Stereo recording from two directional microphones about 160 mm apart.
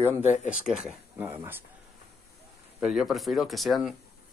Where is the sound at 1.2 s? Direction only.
15° right (ahead or behind).